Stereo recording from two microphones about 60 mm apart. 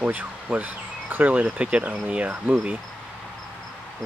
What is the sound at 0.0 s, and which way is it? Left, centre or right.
Speech, right.